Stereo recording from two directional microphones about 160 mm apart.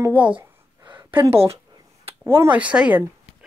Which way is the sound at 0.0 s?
10° right (ahead or behind).